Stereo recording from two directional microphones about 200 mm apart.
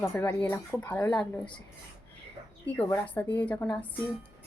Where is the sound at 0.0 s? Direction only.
10° left (ahead or behind).